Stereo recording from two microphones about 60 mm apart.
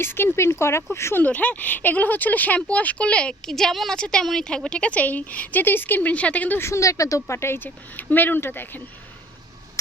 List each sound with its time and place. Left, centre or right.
0.0 s speech: left
1.2 s speech: left
3.5 s a woman's voice: centre; by 6.6 s left
6.6 s speech: left